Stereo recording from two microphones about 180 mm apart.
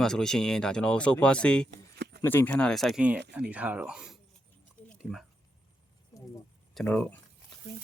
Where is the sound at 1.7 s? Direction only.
65° right (ahead or behind).